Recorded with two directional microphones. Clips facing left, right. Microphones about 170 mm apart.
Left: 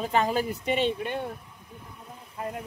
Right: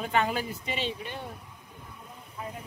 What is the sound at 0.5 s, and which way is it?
Speech, 60° left (ahead or behind).